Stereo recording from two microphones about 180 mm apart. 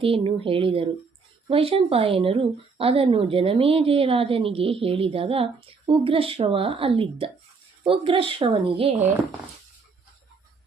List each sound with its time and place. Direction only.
0.0 s speech: 30° right (ahead or behind)